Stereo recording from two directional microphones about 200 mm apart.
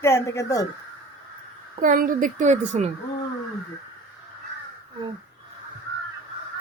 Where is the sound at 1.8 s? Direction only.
40° right (ahead or behind).